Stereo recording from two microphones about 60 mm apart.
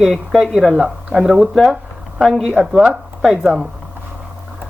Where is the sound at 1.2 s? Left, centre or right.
Centre.